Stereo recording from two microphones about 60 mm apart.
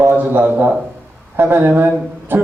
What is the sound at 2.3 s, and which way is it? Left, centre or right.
Music, right.